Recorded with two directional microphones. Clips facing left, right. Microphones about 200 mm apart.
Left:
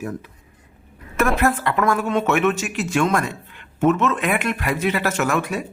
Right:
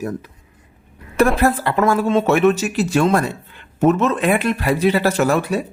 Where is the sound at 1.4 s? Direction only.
30° right (ahead or behind).